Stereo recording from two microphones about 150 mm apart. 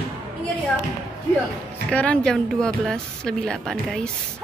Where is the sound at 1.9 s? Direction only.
10° left (ahead or behind).